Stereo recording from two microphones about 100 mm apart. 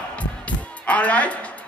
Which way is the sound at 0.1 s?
15° left (ahead or behind).